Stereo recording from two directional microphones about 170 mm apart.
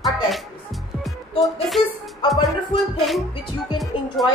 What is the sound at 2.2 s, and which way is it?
Music, 30° left (ahead or behind).